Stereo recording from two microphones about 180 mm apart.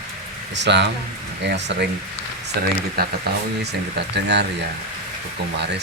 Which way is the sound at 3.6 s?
70° right (ahead or behind).